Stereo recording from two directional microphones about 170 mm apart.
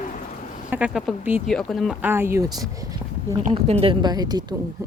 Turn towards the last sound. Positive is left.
turn(degrees=-25)  # may be behind; listen again after turning